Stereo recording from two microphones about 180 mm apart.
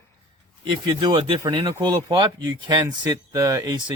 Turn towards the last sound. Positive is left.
turn(degrees=-25)  # may be behind; listen again after turning